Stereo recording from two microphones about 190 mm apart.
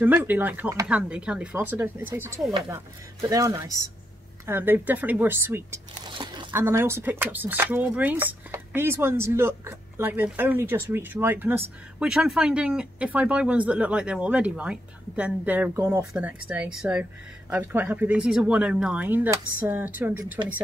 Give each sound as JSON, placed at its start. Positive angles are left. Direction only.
{"t": 0.0, "sound": "speech", "side_deg": -10}
{"t": 6.0, "sound": "a sound", "side_deg": -25}
{"t": 6.5, "sound": "speech", "side_deg": -15}